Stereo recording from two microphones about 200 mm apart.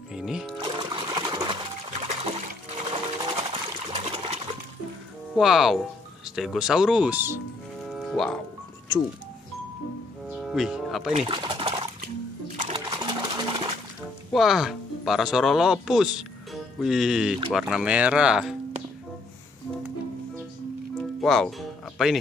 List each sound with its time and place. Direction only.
0.1 s speech: centre (ahead or behind)
0.6 s music: 25° right (ahead or behind)
2.0 s water: 30° right (ahead or behind)
2.7 s sewing machine: 30° right (ahead or behind)
5.3 s speech: centre (ahead or behind)
7.8 s music: centre (ahead or behind)
10.3 s a sound: centre (ahead or behind)
11.1 s sewing machine: 25° right (ahead or behind)
12.5 s water: 30° right (ahead or behind)
14.3 s speech: centre (ahead or behind)
21.2 s music: centre (ahead or behind)